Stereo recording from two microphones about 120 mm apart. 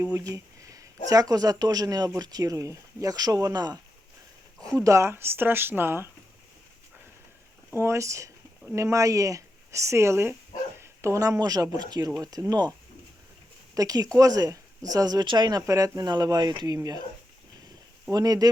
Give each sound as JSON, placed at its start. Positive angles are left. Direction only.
{"t": 0.0, "sound": "speech", "side_deg": -25}
{"t": 7.8, "sound": "speech", "side_deg": -25}
{"t": 13.7, "sound": "speech", "side_deg": -30}
{"t": 18.1, "sound": "speech", "side_deg": -30}